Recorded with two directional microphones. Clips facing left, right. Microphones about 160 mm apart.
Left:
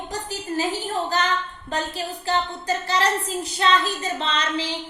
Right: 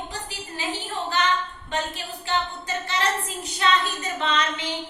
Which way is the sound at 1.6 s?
35° left (ahead or behind).